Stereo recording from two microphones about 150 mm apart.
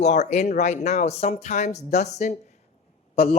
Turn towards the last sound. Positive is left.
turn(degrees=40)  # may be behind; listen again after turning